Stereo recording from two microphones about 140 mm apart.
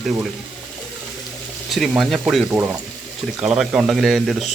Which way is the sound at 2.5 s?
15° right (ahead or behind).